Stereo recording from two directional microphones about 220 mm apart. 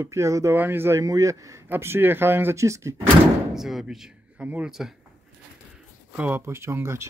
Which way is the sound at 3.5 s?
Centre (ahead or behind).